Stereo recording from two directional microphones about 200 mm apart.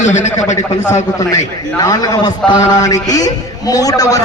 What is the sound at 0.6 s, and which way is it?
A man's voice, 15° left (ahead or behind).